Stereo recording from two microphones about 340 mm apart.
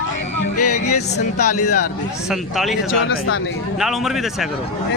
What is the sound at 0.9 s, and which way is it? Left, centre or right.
Speech, left.